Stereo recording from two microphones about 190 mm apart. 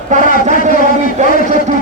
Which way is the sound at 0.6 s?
40° right (ahead or behind).